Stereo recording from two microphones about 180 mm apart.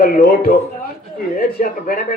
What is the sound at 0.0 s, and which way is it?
Speech, 55° left (ahead or behind).